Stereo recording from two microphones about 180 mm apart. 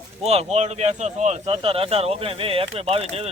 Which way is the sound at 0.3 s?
35° right (ahead or behind).